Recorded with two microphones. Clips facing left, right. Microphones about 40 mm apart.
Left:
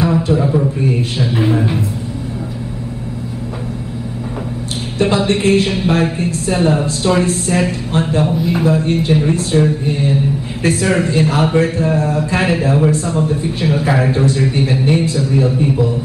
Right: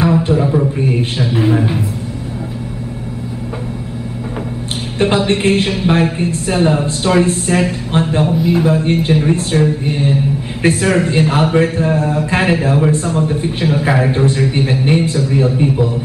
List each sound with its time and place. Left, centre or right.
0.3 s a man's voice: centre
4.9 s speech: right
8.3 s speech: centre
8.6 s speech: right
9.6 s a sound: right
10.6 s speech: right